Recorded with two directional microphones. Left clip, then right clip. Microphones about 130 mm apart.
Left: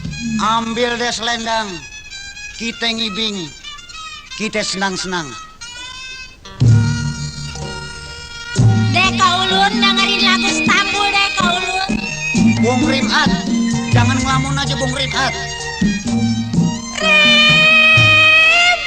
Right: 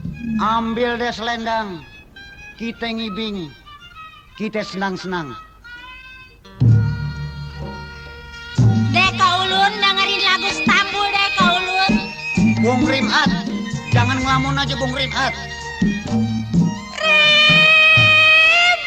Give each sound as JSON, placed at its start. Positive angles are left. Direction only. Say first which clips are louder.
{"t": 0.3, "sound": "speech", "louder": "left 2 dB", "side_deg": 30}
{"t": 6.7, "sound": "music", "louder": "left 6 dB", "side_deg": 25}
{"t": 8.6, "sound": "music", "louder": "left 1 dB", "side_deg": 30}